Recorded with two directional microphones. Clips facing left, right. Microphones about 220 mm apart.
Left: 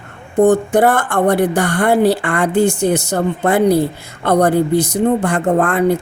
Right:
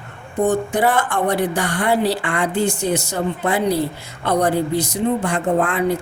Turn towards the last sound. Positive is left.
turn(degrees=50)  # may be behind; listen again after turning